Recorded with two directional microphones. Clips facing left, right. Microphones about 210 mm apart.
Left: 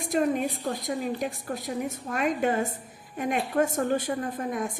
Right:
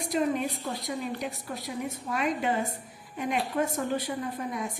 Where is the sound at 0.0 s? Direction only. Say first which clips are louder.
Left 2 dB; 50° left (ahead or behind).